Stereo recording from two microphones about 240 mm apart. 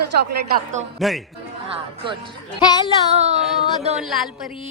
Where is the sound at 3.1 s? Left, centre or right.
Right.